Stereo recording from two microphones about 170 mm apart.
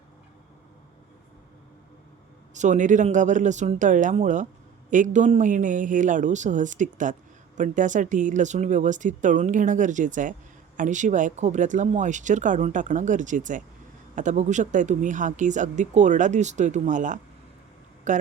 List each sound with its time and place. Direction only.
2.6 s speech: 45° right (ahead or behind)